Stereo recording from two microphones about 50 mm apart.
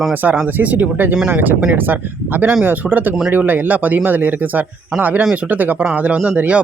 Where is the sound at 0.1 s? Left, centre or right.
Right.